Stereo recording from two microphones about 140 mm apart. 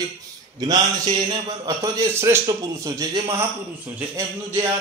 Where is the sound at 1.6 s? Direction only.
25° right (ahead or behind).